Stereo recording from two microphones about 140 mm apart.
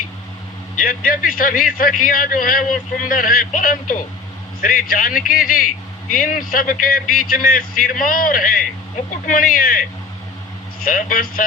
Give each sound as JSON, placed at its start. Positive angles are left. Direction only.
{"t": 0.8, "sound": "a man's voice", "side_deg": 80}
{"t": 10.8, "sound": "a man's voice", "side_deg": 80}